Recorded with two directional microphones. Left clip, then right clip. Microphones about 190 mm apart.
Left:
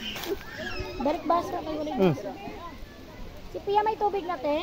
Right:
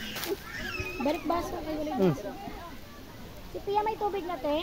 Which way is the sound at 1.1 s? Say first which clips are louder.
Left 5 dB; 15° left (ahead or behind).